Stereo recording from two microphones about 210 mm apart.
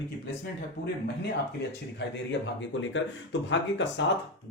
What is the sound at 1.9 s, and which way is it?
A man's voice, 60° left (ahead or behind).